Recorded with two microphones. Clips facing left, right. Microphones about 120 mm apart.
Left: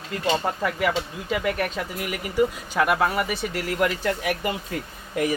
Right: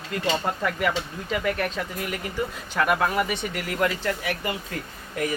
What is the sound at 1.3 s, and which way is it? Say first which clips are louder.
Speech: left 1 dB; 5° left (ahead or behind).